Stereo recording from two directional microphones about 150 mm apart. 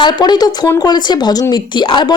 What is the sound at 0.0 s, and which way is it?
A woman's voice, 30° left (ahead or behind).